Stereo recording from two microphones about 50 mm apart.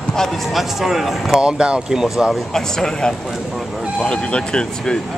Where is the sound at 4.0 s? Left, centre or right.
Left.